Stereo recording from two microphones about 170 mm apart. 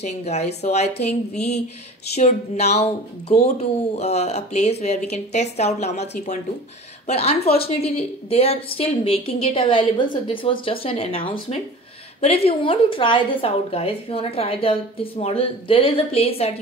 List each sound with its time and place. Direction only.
0.0 s a woman's voice: 40° left (ahead or behind)
2.1 s a woman's voice: 40° left (ahead or behind)